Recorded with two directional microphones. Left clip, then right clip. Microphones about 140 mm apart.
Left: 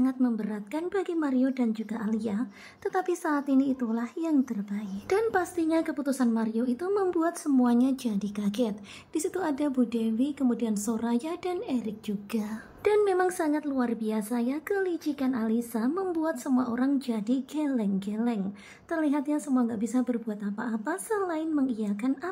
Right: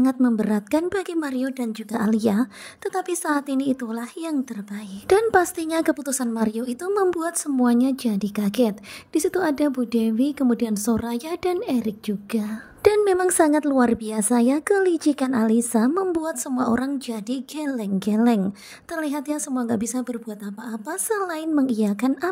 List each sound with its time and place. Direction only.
0.0 s a woman's voice: 50° right (ahead or behind)
7.5 s a woman's voice: 35° right (ahead or behind)
12.3 s a woman's voice: 30° right (ahead or behind)